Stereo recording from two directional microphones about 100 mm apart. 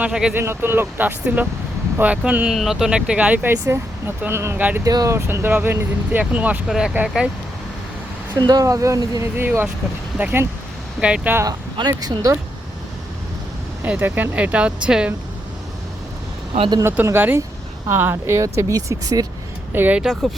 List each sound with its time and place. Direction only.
0.0 s speech: 10° right (ahead or behind)
0.3 s speech: 20° right (ahead or behind)
2.5 s speech: centre (ahead or behind); by 4.8 s 20° right (ahead or behind)
4.8 s speech: 35° right (ahead or behind)
5.1 s speech: 25° right (ahead or behind); by 6.9 s 5° right (ahead or behind)
8.4 s speech: 40° right (ahead or behind)
9.4 s speech: 20° right (ahead or behind)
11.4 s speech: 40° right (ahead or behind)
13.8 s speech: 15° right (ahead or behind)
16.6 s speech: 50° right (ahead or behind)
16.8 s speech: 25° right (ahead or behind)
19.7 s speech: 20° right (ahead or behind)
20.0 s speech: 5° right (ahead or behind)